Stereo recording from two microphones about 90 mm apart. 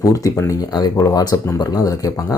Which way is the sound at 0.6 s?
45° left (ahead or behind).